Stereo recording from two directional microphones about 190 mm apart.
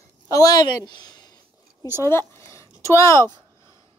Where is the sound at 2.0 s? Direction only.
15° left (ahead or behind).